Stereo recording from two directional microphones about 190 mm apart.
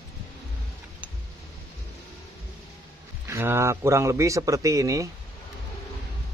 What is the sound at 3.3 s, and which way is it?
Speech, 15° right (ahead or behind).